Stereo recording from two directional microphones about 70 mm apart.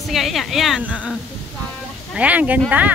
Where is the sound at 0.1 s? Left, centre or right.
Centre.